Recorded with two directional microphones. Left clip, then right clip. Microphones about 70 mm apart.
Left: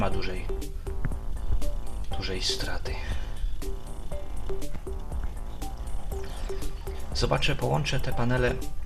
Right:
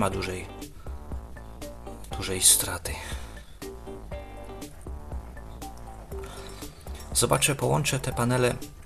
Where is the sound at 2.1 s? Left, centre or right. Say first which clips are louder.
Right 4 dB; right.